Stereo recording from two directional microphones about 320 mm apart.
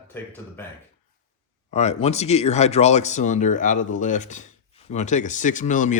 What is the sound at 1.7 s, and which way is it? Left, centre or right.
Speech, left.